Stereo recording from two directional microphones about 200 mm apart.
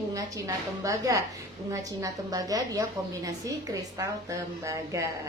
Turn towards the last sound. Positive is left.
turn(degrees=-15)  # may be behind; listen again after turning